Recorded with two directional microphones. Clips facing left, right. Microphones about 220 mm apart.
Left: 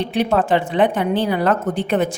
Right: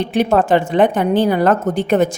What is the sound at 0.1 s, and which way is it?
A woman's voice, 45° right (ahead or behind).